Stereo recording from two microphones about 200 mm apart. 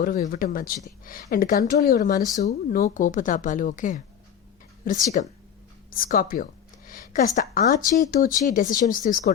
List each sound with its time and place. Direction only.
0.0 s a woman's voice: 45° left (ahead or behind)